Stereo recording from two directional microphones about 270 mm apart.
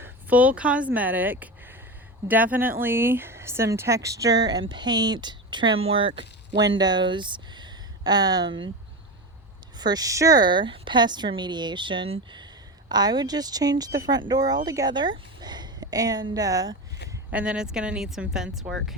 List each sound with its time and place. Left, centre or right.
0.0 s speech: centre
9.7 s speech: centre